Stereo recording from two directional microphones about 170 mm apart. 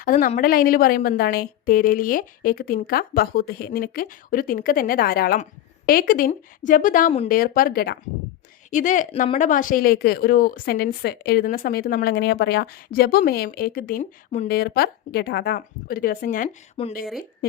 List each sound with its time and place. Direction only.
0.0 s a woman's voice: 55° left (ahead or behind)
8.7 s a woman's voice: 50° left (ahead or behind)
16.8 s speech: 30° left (ahead or behind)